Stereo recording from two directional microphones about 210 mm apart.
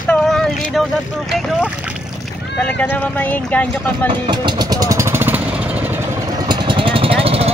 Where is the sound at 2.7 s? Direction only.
5° left (ahead or behind).